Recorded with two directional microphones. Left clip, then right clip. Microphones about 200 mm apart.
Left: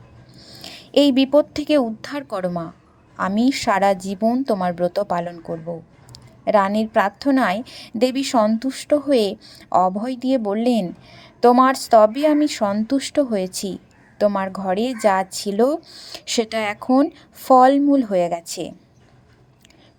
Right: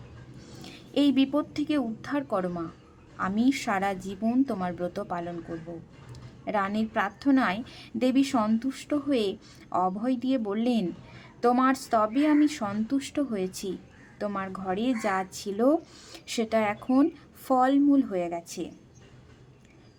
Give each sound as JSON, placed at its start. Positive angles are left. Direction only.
{"t": 0.6, "sound": "speech", "side_deg": 40}
{"t": 6.4, "sound": "speech", "side_deg": 35}